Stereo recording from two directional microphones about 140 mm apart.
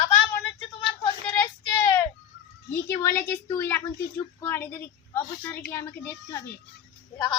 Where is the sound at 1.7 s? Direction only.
20° left (ahead or behind).